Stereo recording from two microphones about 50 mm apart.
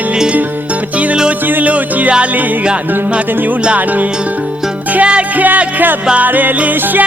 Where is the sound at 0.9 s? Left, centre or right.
Right.